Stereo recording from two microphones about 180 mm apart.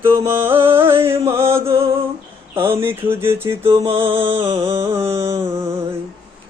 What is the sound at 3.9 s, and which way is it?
Music, 30° right (ahead or behind).